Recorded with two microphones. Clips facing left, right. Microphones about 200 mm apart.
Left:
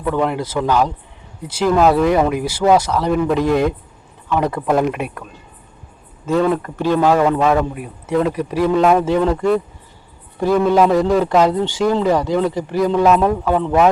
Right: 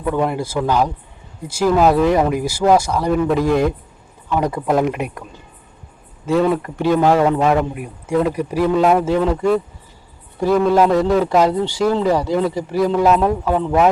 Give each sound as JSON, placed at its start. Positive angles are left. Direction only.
{"t": 0.0, "sound": "speech", "side_deg": -10}
{"t": 4.3, "sound": "speech", "side_deg": -10}
{"t": 6.2, "sound": "speech", "side_deg": -5}
{"t": 7.3, "sound": "speech", "side_deg": -20}